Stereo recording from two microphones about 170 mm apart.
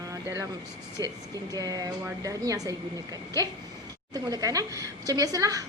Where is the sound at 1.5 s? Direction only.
20° right (ahead or behind).